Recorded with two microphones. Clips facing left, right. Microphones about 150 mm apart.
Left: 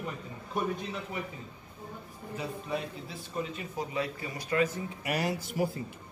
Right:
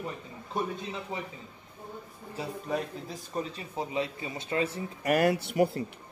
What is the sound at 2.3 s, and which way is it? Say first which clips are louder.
Speech: right 2 dB; 40° right (ahead or behind).